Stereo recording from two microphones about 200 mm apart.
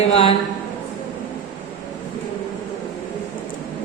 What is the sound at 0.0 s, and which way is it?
Speech, 30° left (ahead or behind).